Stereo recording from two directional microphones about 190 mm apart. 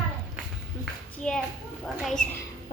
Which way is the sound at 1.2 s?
5° left (ahead or behind).